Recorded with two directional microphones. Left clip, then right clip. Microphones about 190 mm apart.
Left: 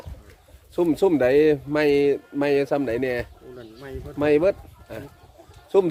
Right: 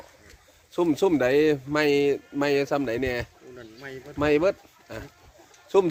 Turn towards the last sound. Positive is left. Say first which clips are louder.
# left 2 dB
turn(degrees=-5)  # may be behind; listen again after turning